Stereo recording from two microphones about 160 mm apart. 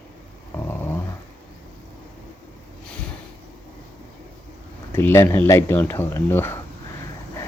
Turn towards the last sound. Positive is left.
turn(degrees=15)  # may be behind; listen again after turning